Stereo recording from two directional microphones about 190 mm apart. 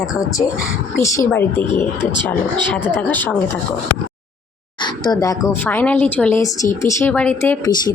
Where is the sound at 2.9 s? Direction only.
10° left (ahead or behind).